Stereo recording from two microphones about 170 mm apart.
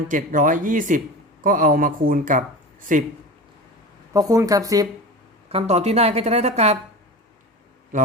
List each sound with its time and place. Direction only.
0.1 s speech: 50° right (ahead or behind)
4.1 s speech: 20° right (ahead or behind)
5.5 s a woman's voice: 35° right (ahead or behind)